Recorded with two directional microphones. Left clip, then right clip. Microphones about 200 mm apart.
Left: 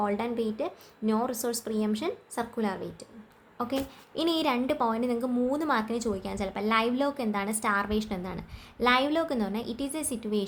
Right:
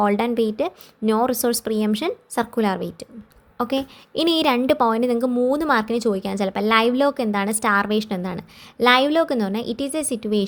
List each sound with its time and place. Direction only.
0.0 s a woman's voice: 40° right (ahead or behind)